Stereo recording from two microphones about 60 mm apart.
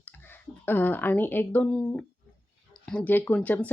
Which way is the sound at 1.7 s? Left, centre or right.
Centre.